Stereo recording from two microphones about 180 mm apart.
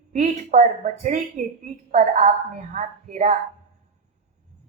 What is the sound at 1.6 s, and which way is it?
Speech, 40° right (ahead or behind).